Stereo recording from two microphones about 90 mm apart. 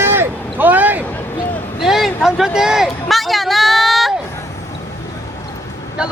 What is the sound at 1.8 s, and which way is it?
Speech, 5° right (ahead or behind).